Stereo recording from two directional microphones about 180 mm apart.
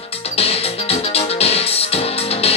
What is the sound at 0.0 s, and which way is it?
Music, 35° left (ahead or behind).